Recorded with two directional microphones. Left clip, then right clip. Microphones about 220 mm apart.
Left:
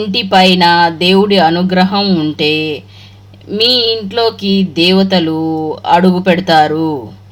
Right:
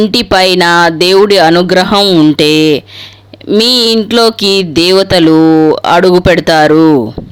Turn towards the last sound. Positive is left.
turn(degrees=-50)  # may be behind; listen again after turning